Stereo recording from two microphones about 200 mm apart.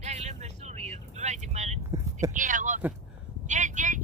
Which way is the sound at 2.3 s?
40° right (ahead or behind).